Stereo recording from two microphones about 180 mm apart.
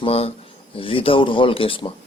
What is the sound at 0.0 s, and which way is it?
Speech, 35° left (ahead or behind).